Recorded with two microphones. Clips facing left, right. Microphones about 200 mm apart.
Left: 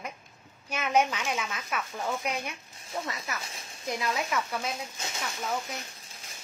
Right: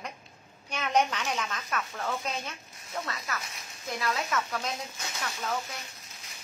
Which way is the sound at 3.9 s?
15° left (ahead or behind).